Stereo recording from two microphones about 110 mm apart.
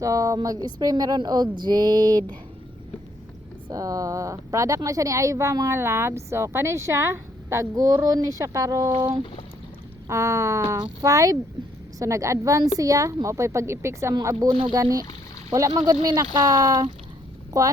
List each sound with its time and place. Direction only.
0.0 s speech: 30° right (ahead or behind)
3.7 s a woman's voice: 35° right (ahead or behind)
10.1 s a woman's voice: 25° right (ahead or behind)